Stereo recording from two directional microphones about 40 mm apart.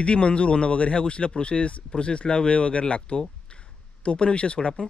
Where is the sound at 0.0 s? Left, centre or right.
Left.